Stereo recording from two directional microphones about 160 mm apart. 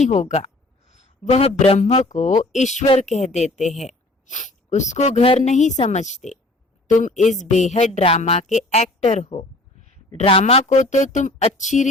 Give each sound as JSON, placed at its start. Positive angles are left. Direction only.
{"t": 0.0, "sound": "a woman's voice", "side_deg": 45}